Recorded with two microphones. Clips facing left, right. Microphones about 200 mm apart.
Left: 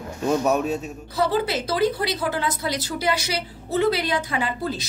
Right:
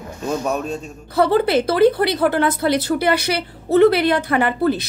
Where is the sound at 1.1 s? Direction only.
60° right (ahead or behind).